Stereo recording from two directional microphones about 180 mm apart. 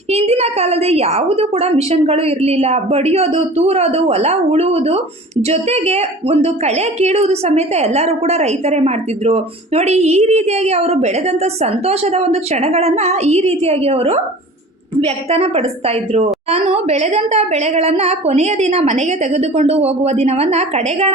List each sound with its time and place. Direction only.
0.1 s a woman's voice: 35° right (ahead or behind)